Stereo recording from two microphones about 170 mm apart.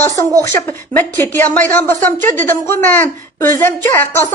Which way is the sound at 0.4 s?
15° left (ahead or behind).